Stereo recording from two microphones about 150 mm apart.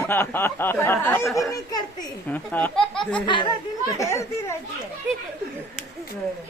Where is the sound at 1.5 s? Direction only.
25° left (ahead or behind).